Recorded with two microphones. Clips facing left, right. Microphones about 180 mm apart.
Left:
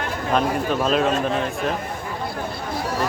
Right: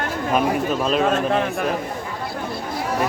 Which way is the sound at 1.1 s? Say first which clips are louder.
Right 2 dB; 60° right (ahead or behind).